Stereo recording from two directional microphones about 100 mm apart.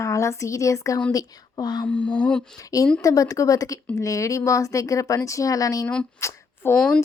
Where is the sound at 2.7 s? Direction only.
35° left (ahead or behind).